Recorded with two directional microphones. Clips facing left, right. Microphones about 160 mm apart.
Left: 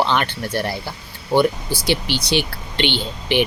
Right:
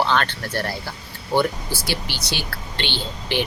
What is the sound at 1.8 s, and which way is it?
Speech, 20° left (ahead or behind).